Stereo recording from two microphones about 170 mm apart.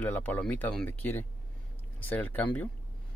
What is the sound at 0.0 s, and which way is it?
Speech, 10° left (ahead or behind).